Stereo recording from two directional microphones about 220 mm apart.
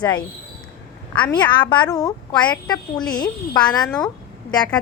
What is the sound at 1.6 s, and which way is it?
Speech, 20° left (ahead or behind).